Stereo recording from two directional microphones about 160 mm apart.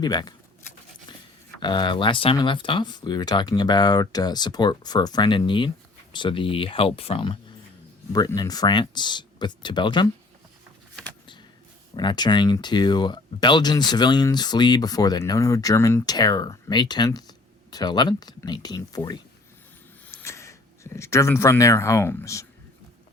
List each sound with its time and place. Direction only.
0.0 s speech: 25° left (ahead or behind)
1.6 s speech: 30° left (ahead or behind)
8.1 s speech: 25° left (ahead or behind)
11.9 s speech: 25° left (ahead or behind)